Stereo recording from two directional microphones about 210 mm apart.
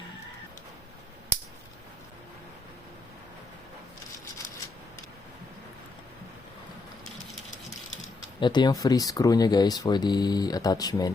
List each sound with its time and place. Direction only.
8.0 s speech: 20° left (ahead or behind)